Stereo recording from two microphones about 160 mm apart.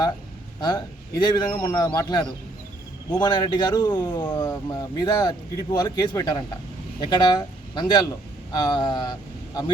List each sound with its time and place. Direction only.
0.6 s speech: 25° left (ahead or behind)